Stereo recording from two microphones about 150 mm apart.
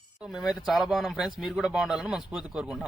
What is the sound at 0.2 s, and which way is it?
Speech, 5° right (ahead or behind).